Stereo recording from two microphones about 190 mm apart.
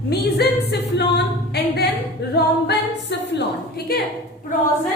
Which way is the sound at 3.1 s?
65° left (ahead or behind).